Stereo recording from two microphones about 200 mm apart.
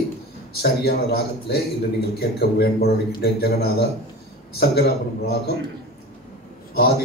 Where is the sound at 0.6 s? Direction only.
50° left (ahead or behind).